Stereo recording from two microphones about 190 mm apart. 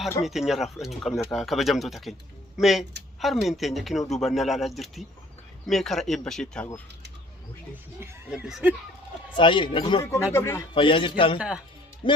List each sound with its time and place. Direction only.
0.2 s speech: centre (ahead or behind)
8.0 s speech: 5° right (ahead or behind)
9.3 s speech: 25° left (ahead or behind)
10.0 s speech: 15° left (ahead or behind)
10.8 s speech: 25° left (ahead or behind)
11.3 s speech: 5° right (ahead or behind)
12.0 s speech: 25° left (ahead or behind)